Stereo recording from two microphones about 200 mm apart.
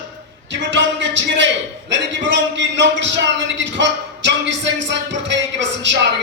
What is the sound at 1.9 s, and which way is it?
Speech, 65° right (ahead or behind).